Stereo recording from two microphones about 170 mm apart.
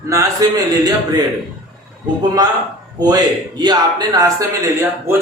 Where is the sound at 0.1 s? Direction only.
20° right (ahead or behind).